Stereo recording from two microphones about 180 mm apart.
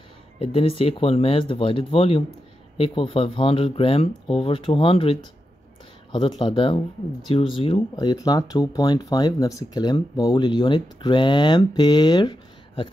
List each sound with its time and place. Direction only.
0.4 s speech: 30° left (ahead or behind)